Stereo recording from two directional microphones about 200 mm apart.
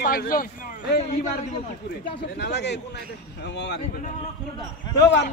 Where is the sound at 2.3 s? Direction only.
55° left (ahead or behind).